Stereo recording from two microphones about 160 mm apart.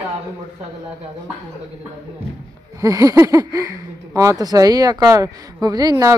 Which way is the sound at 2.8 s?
20° right (ahead or behind).